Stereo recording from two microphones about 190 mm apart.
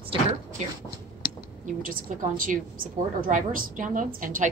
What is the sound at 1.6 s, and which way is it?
A woman's voice, 45° right (ahead or behind).